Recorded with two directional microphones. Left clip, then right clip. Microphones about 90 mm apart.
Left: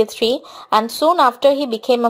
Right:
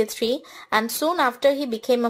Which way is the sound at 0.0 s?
20° left (ahead or behind).